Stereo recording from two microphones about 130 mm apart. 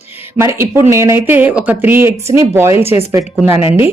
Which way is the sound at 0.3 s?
20° right (ahead or behind).